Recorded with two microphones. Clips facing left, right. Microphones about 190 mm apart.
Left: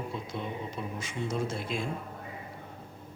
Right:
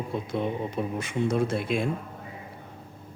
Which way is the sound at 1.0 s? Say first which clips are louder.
Right 7 dB; 55° right (ahead or behind).